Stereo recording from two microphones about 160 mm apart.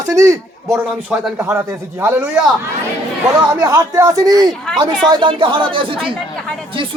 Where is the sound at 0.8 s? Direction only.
5° right (ahead or behind).